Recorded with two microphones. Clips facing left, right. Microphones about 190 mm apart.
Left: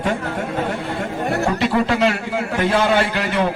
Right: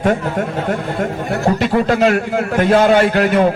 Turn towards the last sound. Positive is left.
turn(degrees=-50)  # may be behind; listen again after turning